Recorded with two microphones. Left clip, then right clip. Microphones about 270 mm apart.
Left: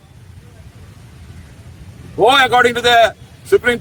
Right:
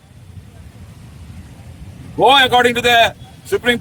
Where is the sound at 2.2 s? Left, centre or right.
Centre.